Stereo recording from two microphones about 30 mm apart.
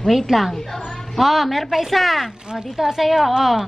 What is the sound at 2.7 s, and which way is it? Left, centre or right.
Speech, centre.